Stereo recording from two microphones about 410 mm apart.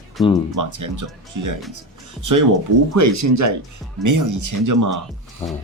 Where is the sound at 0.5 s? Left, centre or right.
Right.